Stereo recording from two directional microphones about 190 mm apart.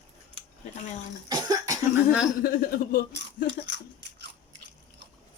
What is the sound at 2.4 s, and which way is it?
Speech, 50° left (ahead or behind).